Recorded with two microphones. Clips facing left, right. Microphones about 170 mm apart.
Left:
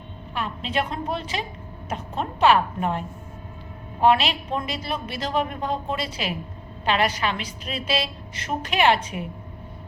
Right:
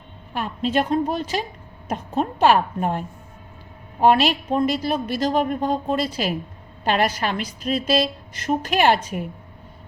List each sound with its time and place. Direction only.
0.3 s a woman's voice: 45° right (ahead or behind)
4.0 s a woman's voice: 45° right (ahead or behind)